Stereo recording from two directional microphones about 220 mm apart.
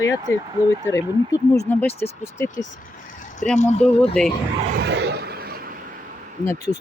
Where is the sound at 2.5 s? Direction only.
35° left (ahead or behind).